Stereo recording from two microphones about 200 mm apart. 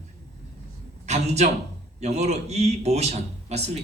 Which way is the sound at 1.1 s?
35° right (ahead or behind).